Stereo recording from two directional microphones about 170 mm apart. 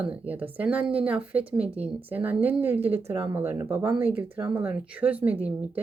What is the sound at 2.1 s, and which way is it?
Speech, 10° right (ahead or behind).